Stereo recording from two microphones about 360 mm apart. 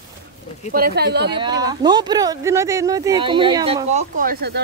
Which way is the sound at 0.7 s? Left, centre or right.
Right.